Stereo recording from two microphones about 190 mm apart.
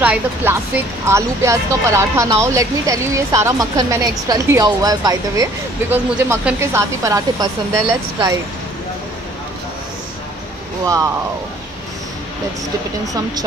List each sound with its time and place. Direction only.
0.0 s speech: 10° right (ahead or behind)
13.1 s speech: 20° right (ahead or behind)